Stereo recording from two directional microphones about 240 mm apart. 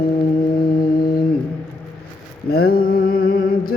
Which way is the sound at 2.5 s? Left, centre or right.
Left.